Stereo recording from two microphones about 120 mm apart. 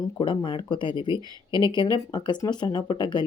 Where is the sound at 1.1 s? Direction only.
35° right (ahead or behind).